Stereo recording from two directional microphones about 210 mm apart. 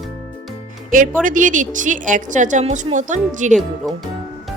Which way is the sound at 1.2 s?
40° right (ahead or behind).